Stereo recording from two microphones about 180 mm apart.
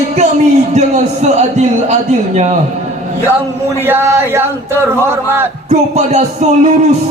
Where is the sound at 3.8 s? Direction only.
10° right (ahead or behind).